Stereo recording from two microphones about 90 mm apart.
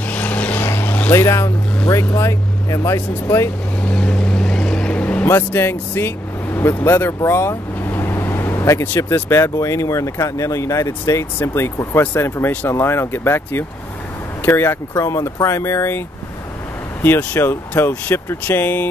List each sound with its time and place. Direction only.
0.1 s vehicle: 20° left (ahead or behind)
1.1 s speech: 35° left (ahead or behind)
3.8 s vehicle: 10° left (ahead or behind)
5.2 s speech: 25° left (ahead or behind)
7.2 s vehicle: 25° left (ahead or behind)
8.8 s speech: 25° left (ahead or behind)
17.0 s speech: 20° left (ahead or behind)